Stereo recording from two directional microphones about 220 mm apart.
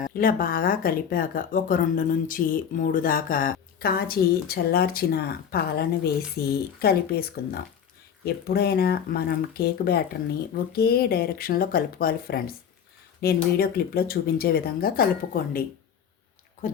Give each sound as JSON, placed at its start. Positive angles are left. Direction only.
{"t": 0.0, "sound": "speech", "side_deg": 40}